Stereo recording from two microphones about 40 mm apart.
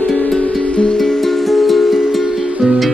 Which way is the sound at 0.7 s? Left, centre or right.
Left.